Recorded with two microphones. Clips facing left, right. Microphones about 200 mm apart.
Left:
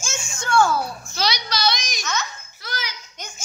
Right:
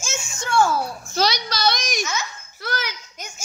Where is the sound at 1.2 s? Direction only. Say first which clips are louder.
Right 3 dB; 50° right (ahead or behind).